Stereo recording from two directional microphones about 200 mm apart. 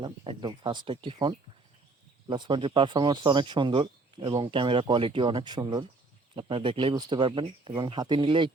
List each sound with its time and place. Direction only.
0.0 s speech: 25° right (ahead or behind)
2.3 s speech: 25° right (ahead or behind)